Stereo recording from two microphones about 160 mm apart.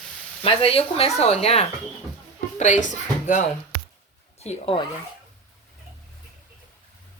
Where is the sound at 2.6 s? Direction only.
50° left (ahead or behind).